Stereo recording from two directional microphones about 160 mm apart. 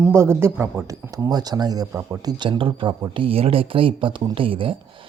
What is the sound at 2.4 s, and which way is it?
Speech, 30° right (ahead or behind).